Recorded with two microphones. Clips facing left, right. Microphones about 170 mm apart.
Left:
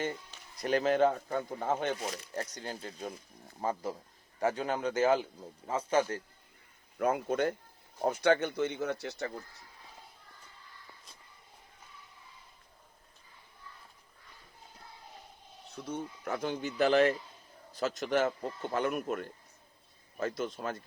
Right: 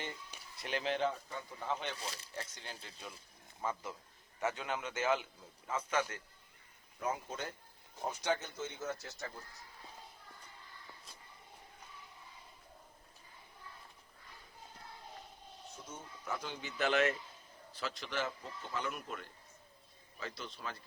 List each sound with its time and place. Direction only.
0.5 s a man's voice: 40° left (ahead or behind)
7.0 s speech: 60° left (ahead or behind)
15.7 s speech: 65° left (ahead or behind); by 20.8 s 45° left (ahead or behind)